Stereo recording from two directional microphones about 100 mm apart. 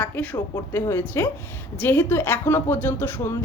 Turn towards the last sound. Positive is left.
turn(degrees=20)  # may be behind; listen again after turning